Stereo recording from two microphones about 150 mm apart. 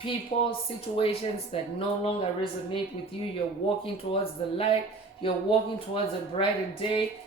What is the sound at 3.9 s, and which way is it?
Speech, 40° left (ahead or behind).